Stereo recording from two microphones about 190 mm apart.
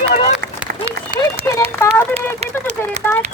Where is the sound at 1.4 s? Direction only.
15° left (ahead or behind).